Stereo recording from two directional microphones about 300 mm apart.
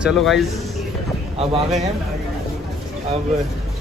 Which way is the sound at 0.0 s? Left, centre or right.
Centre.